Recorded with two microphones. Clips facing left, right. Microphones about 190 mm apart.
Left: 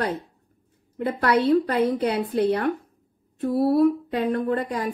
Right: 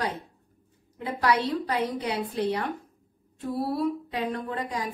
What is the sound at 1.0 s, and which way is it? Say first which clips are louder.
A woman's voice: left 4 dB; 55° left (ahead or behind).